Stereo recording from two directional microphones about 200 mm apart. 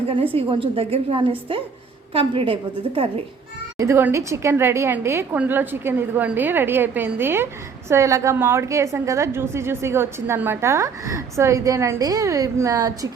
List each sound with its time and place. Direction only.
0.3 s a woman's voice: 30° right (ahead or behind)
3.8 s a woman's voice: 15° right (ahead or behind)